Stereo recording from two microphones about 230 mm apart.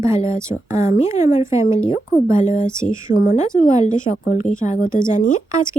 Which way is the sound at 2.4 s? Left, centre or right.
Left.